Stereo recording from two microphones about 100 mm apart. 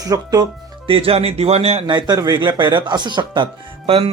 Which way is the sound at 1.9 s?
45° right (ahead or behind).